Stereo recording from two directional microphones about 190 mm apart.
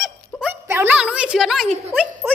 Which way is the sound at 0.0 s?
5° right (ahead or behind).